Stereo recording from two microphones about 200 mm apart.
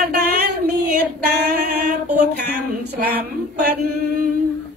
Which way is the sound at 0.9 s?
50° right (ahead or behind).